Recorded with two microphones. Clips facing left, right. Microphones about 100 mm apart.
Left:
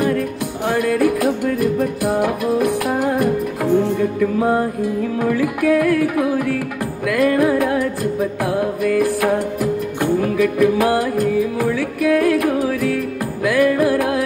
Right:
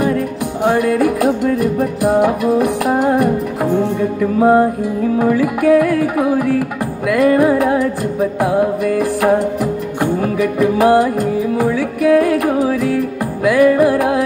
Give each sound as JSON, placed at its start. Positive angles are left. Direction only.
{"t": 0.7, "sound": "music", "side_deg": -25}